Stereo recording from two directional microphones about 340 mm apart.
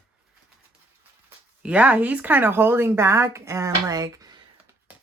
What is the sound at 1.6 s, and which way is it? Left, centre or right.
Speech, centre.